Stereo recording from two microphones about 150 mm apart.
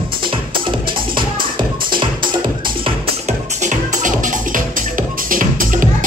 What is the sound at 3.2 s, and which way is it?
Music, 55° right (ahead or behind).